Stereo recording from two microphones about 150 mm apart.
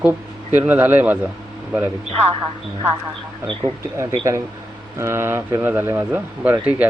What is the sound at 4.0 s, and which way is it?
Speech, 20° right (ahead or behind).